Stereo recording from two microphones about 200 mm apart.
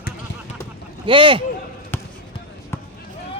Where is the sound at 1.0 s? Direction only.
25° right (ahead or behind).